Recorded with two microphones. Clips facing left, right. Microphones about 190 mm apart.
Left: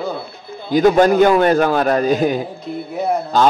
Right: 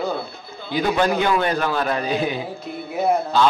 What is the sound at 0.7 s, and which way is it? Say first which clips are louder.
A man's voice: left 8 dB; 45° left (ahead or behind).